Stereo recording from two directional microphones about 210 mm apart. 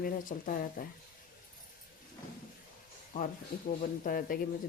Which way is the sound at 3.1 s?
40° left (ahead or behind).